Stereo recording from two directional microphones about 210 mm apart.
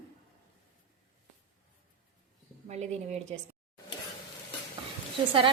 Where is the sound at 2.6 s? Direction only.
30° right (ahead or behind).